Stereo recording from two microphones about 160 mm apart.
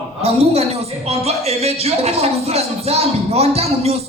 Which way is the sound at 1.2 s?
40° right (ahead or behind).